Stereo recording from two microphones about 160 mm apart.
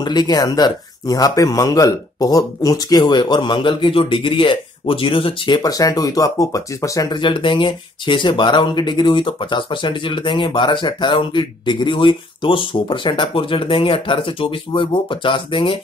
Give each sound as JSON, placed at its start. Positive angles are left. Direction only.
{"t": 0.0, "sound": "speech", "side_deg": 25}